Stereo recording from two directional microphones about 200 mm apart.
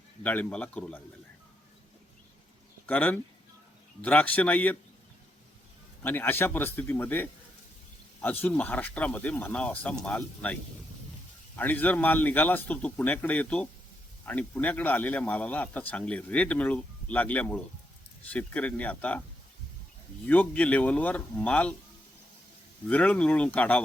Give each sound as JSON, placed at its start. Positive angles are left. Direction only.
{"t": 0.2, "sound": "a man's voice", "side_deg": 10}
{"t": 2.8, "sound": "a man's voice", "side_deg": 10}
{"t": 6.0, "sound": "a man's voice", "side_deg": 10}
{"t": 20.2, "sound": "a man's voice", "side_deg": 10}
{"t": 22.9, "sound": "a man's voice", "side_deg": 5}